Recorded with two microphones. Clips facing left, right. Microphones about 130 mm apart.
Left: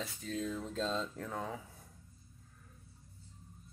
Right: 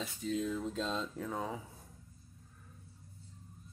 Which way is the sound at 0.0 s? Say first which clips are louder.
Right 3 dB; 5° right (ahead or behind).